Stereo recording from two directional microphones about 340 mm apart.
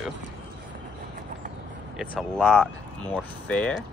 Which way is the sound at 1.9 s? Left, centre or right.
Centre.